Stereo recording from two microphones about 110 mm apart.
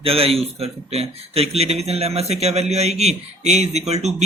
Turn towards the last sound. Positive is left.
turn(degrees=-80)